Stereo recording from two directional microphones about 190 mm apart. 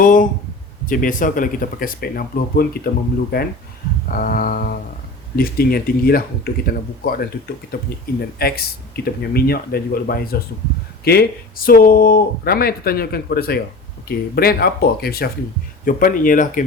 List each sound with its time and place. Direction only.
0.0 s speech: 45° left (ahead or behind)